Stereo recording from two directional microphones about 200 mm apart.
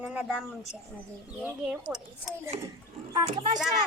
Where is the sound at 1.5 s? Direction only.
5° right (ahead or behind).